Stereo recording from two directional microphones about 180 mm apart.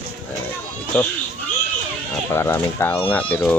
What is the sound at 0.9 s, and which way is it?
Speech, 5° left (ahead or behind).